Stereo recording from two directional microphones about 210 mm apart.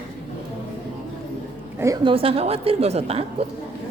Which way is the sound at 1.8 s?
15° right (ahead or behind).